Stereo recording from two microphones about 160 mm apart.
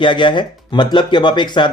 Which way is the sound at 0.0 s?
30° left (ahead or behind).